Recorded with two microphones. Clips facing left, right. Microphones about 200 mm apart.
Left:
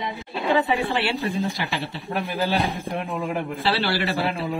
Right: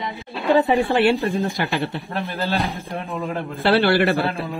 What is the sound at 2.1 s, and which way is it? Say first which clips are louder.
Speech: left 3 dB; 15° left (ahead or behind).